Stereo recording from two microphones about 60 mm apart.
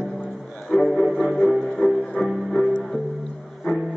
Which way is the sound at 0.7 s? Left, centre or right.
Centre.